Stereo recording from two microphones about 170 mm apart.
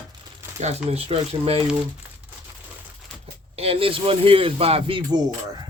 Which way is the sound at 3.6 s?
35° right (ahead or behind).